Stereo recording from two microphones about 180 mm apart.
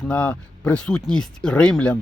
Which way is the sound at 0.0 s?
5° left (ahead or behind).